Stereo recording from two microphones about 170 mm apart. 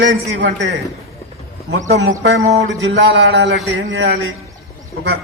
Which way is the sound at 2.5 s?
90° right.